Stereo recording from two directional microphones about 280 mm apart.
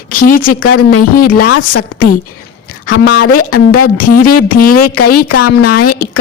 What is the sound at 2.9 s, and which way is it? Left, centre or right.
Speech, left.